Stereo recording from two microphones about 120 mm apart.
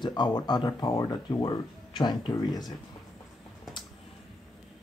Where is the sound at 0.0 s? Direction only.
40° left (ahead or behind).